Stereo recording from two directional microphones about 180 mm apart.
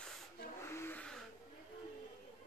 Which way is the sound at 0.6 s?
15° left (ahead or behind).